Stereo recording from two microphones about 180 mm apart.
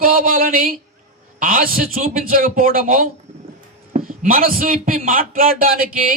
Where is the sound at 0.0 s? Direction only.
50° right (ahead or behind).